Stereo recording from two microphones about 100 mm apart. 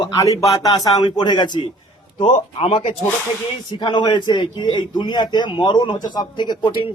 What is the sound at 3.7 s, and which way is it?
A man's voice, 50° left (ahead or behind).